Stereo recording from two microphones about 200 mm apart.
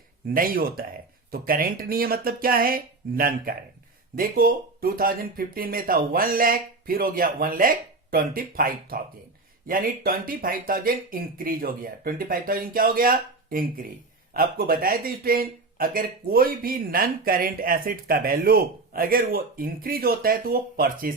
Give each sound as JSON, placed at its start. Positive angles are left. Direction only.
{"t": 0.3, "sound": "speech", "side_deg": -45}